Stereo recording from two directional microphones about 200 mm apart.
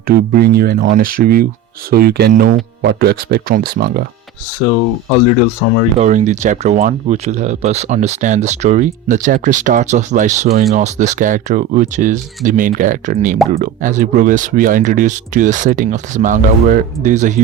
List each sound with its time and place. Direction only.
0.1 s speech: 50° right (ahead or behind)
6.0 s speech: 35° right (ahead or behind)